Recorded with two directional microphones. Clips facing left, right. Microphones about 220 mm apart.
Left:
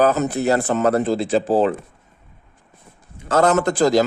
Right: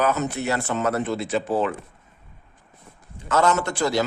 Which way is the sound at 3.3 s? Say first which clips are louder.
Left 5 dB; 35° left (ahead or behind).